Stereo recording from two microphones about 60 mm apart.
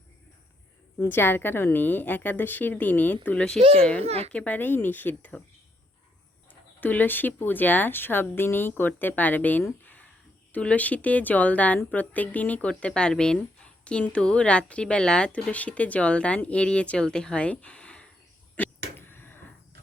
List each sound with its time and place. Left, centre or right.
0.9 s a woman's voice: left
3.4 s speech: centre; by 5.4 s left
6.5 s a woman's voice: left
9.8 s a sound: left
10.5 s a woman's voice: left
18.5 s a sound: left